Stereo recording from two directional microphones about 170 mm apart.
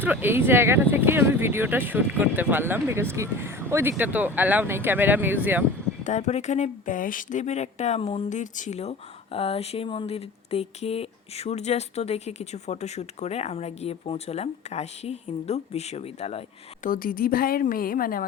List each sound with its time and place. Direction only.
0.0 s speech: 10° right (ahead or behind)
6.1 s speech: 45° left (ahead or behind)
16.8 s a woman's voice: 55° left (ahead or behind)